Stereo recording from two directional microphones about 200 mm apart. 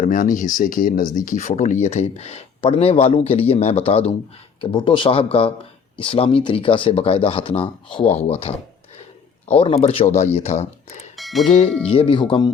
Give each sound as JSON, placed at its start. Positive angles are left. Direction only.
{"t": 0.0, "sound": "speech", "side_deg": 40}
{"t": 9.6, "sound": "speech", "side_deg": 30}
{"t": 11.2, "sound": "music", "side_deg": 0}
{"t": 11.9, "sound": "speech", "side_deg": 25}